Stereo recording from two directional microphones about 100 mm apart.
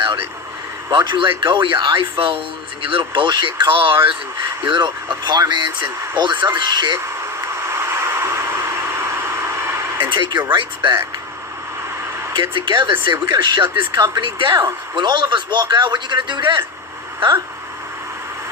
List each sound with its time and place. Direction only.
0.9 s speech: 50° right (ahead or behind)
2.1 s speech: 60° right (ahead or behind)
7.4 s a sound: 30° right (ahead or behind)
10.1 s speech: 50° right (ahead or behind)
12.4 s speech: 55° right (ahead or behind)